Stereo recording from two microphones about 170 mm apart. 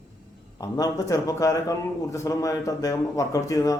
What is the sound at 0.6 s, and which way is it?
A man's voice, 20° left (ahead or behind).